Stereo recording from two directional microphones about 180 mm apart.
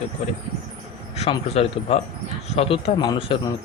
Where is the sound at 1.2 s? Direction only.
35° left (ahead or behind).